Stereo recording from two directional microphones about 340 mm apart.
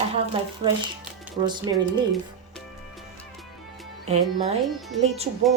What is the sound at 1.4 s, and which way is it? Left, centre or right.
Speech, centre.